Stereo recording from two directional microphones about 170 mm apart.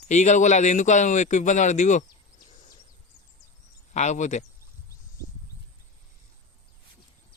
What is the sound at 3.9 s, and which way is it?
Speech, 45° left (ahead or behind).